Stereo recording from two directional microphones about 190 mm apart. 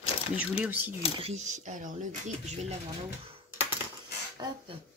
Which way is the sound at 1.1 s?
35° right (ahead or behind).